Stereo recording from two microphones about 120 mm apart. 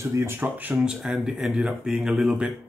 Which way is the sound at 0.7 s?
5° right (ahead or behind).